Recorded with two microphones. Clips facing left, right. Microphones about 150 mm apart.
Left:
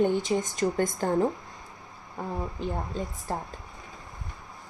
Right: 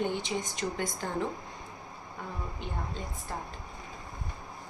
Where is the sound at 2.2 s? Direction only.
35° left (ahead or behind).